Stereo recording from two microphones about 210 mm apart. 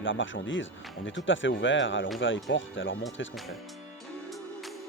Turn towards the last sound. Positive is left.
turn(degrees=0)  # may be behind; listen again after turning